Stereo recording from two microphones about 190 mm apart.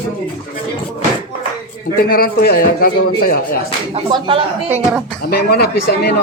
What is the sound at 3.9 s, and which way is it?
Speech, 25° right (ahead or behind).